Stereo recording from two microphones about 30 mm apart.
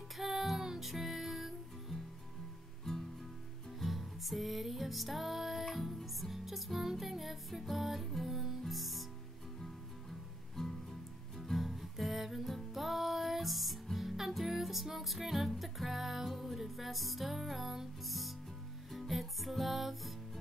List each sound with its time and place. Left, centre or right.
0.2 s music: centre
0.6 s music: centre
0.8 s music: centre
2.9 s music: centre
3.8 s music: centre
10.5 s music: centre
11.5 s music: centre
16.3 s music: centre